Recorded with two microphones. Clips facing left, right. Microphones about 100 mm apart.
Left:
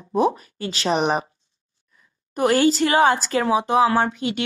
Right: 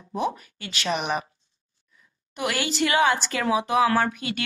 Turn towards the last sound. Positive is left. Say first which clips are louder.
# left 3 dB
turn(degrees=25)  # may be behind; listen again after turning